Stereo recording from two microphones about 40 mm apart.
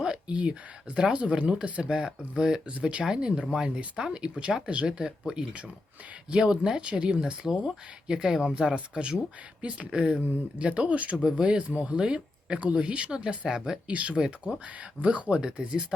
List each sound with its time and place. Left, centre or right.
0.3 s speech: right; by 2.6 s centre
2.6 s speech: right
3.0 s speech: centre; by 11.3 s right
11.3 s speech: right
11.6 s speech: right
11.9 s speech: right
13.8 s speech: right